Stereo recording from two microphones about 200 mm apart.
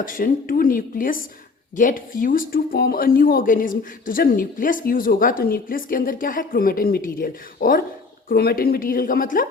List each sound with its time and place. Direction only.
0.0 s speech: 45° left (ahead or behind)